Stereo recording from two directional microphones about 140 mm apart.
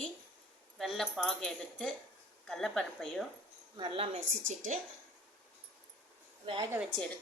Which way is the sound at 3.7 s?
35° right (ahead or behind).